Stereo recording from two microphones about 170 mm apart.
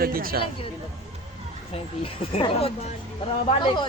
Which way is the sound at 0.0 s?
60° right (ahead or behind).